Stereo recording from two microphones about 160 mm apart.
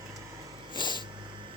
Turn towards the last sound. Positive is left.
turn(degrees=30)  # may be behind; listen again after turning